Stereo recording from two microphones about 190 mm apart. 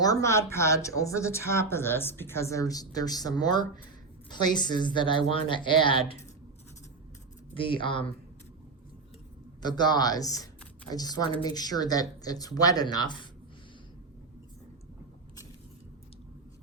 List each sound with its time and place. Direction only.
0.0 s a woman's voice: 15° left (ahead or behind)
7.5 s a woman's voice: 25° left (ahead or behind)
9.6 s a woman's voice: 20° left (ahead or behind)